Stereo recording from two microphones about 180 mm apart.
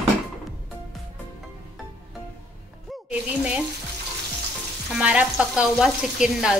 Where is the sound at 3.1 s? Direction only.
5° right (ahead or behind).